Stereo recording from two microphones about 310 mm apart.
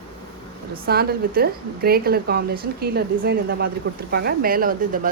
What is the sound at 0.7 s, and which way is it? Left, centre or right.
A woman's voice, right.